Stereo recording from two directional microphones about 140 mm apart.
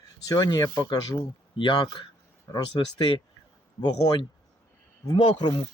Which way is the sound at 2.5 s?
25° left (ahead or behind).